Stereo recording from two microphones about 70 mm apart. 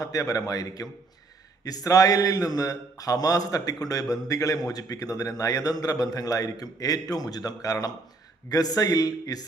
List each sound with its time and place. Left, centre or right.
0.0 s a man's voice: left